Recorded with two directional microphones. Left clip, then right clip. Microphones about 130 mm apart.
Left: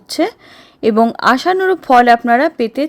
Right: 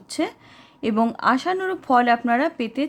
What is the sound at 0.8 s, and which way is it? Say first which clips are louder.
Speech: left 9 dB; 55° left (ahead or behind).